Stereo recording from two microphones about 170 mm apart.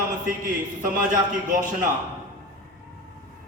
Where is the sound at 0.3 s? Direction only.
55° right (ahead or behind).